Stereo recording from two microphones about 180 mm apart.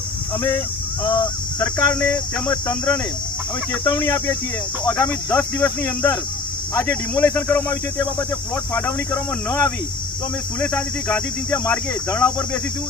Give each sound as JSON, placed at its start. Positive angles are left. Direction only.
{"t": 1.0, "sound": "speech", "side_deg": 25}
{"t": 1.5, "sound": "speech", "side_deg": 10}